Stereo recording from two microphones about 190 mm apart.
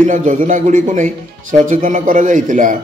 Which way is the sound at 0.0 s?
40° right (ahead or behind).